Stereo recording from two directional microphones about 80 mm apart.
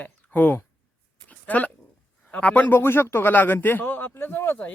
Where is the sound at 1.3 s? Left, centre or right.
Centre.